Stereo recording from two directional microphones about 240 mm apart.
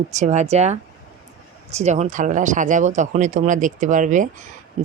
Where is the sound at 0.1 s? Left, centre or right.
Right.